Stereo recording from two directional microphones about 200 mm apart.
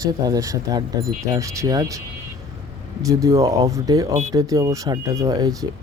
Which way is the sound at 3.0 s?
15° right (ahead or behind).